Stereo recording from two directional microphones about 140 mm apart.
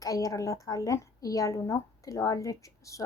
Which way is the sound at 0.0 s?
25° left (ahead or behind).